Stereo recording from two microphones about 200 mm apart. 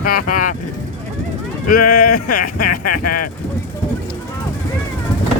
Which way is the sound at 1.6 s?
45° left (ahead or behind).